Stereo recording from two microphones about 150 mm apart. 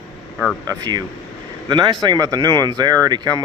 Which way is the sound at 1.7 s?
30° right (ahead or behind).